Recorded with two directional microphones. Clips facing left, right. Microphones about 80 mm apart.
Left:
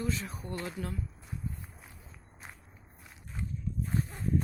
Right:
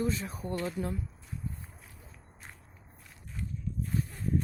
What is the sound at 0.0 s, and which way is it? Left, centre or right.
Speech, right.